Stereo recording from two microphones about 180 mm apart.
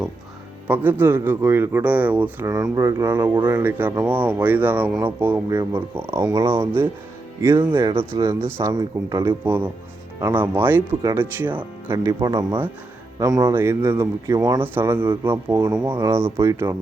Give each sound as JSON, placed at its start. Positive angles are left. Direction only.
{"t": 0.7, "sound": "speech", "side_deg": -10}
{"t": 7.6, "sound": "speech", "side_deg": -25}
{"t": 8.1, "sound": "speech", "side_deg": -15}
{"t": 9.4, "sound": "speech", "side_deg": -10}